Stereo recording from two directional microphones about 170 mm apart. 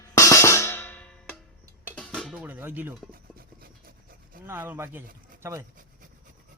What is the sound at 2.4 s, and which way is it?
Speech, 10° right (ahead or behind).